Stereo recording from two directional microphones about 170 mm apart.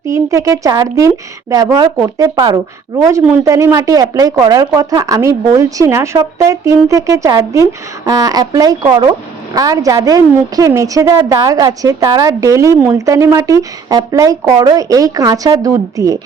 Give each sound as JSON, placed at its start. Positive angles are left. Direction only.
{"t": 0.1, "sound": "a woman's voice", "side_deg": -20}